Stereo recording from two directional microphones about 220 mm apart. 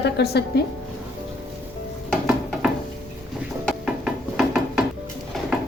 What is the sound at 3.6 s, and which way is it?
Music, centre (ahead or behind).